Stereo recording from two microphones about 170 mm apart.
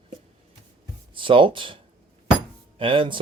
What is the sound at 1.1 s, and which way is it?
Speech, 30° right (ahead or behind).